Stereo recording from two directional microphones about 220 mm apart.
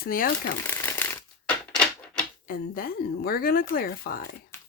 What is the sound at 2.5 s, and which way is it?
Speech, 40° left (ahead or behind).